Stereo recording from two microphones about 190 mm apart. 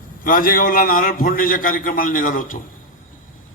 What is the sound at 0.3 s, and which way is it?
A man's voice, 45° left (ahead or behind).